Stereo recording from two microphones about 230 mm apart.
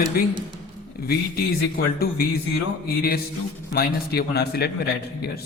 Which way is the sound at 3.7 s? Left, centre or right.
Left.